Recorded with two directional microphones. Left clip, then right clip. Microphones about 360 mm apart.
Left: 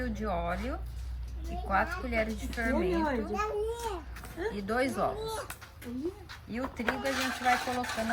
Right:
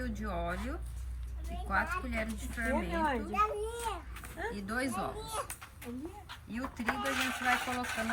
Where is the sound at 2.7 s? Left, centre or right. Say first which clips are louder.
Left 2 dB; right.